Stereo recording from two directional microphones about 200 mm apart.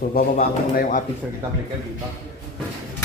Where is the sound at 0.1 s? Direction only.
45° left (ahead or behind).